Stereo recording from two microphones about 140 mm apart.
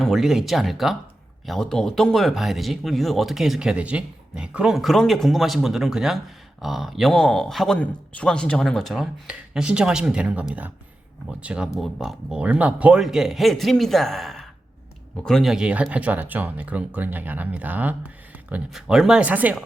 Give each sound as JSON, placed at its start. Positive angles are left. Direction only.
{"t": 0.0, "sound": "speech", "side_deg": 0}